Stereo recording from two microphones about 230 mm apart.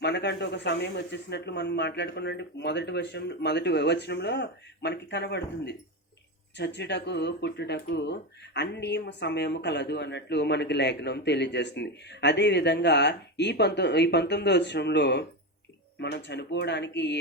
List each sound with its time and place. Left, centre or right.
0.0 s speech: left